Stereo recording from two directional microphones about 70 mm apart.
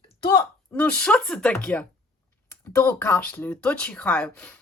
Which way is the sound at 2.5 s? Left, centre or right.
Left.